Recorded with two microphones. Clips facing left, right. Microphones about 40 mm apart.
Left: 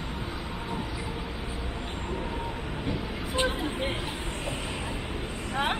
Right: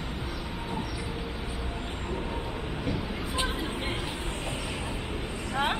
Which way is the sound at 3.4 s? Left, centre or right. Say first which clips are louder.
Left 4 dB; left.